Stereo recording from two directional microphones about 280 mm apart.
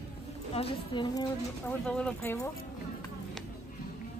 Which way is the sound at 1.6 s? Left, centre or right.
Centre.